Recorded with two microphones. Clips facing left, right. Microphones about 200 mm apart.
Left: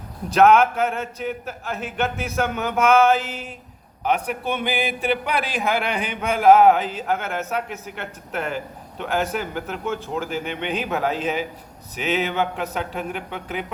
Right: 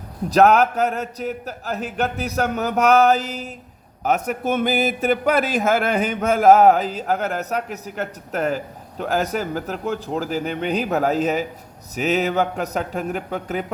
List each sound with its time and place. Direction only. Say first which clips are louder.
0.3 s a man's voice: even; 40° right (ahead or behind)